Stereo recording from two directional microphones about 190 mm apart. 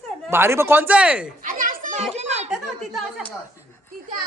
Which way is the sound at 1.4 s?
45° right (ahead or behind).